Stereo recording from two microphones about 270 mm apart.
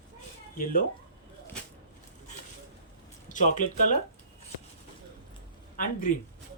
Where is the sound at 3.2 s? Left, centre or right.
Left.